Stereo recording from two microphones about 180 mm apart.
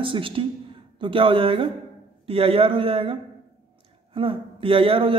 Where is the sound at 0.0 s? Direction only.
30° right (ahead or behind).